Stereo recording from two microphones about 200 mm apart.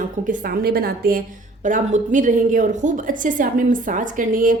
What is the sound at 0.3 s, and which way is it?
A woman's voice, 45° right (ahead or behind).